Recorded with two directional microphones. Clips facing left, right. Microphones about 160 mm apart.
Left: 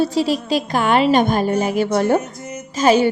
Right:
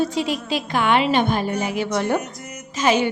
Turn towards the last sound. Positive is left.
turn(degrees=35)  # may be behind; listen again after turning